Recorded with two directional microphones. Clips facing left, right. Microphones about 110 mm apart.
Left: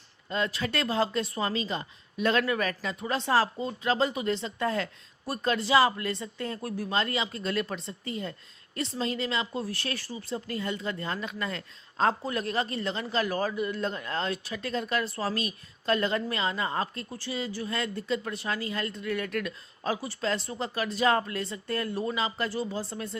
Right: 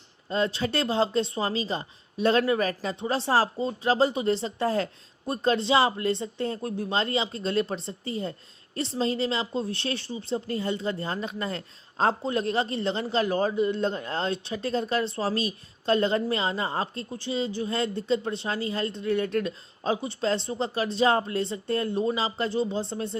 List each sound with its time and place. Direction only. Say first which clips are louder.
0.3 s speech: right 4 dB; 30° right (ahead or behind)